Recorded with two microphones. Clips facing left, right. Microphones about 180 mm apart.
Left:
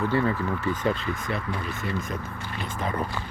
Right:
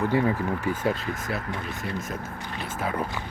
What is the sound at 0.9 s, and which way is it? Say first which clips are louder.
Speech: left 1 dB; 45° right (ahead or behind).